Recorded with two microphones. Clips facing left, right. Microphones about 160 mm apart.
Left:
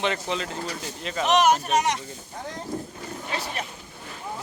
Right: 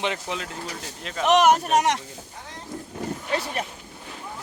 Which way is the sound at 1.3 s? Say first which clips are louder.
Right 3 dB; 60° right (ahead or behind).